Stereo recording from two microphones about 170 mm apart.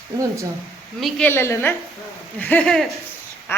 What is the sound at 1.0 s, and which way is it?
A woman's voice, 10° left (ahead or behind).